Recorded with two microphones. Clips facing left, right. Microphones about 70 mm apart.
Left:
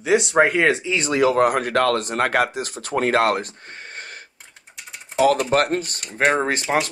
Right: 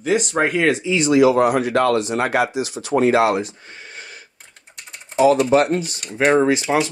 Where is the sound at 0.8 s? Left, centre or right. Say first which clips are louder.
Right 5 dB; left.